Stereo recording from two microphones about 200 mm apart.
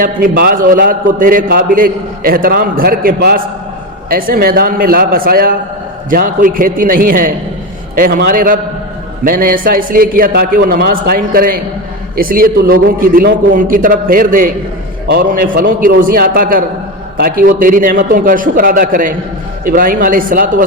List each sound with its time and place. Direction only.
0.0 s a man's voice: 45° right (ahead or behind)